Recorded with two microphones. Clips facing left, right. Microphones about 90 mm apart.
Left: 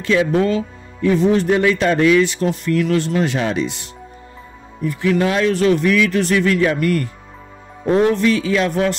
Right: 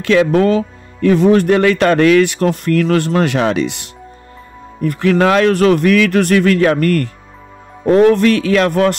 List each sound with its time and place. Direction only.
0.0 s a man's voice: 70° right (ahead or behind)